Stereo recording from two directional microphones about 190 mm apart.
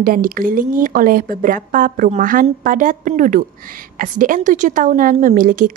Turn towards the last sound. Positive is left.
turn(degrees=-45)  # may be behind; listen again after turning